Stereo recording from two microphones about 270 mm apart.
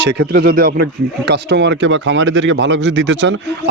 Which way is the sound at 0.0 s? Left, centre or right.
Right.